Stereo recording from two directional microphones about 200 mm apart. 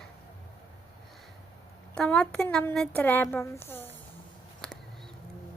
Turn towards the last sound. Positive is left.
turn(degrees=10)  # may be behind; listen again after turning